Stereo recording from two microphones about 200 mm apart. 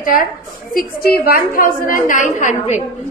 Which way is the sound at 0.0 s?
45° left (ahead or behind).